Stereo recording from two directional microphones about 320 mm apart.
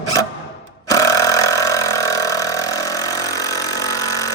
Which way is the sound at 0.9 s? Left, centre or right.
Centre.